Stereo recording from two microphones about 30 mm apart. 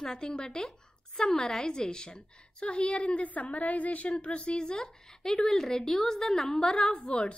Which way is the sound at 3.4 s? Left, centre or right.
Left.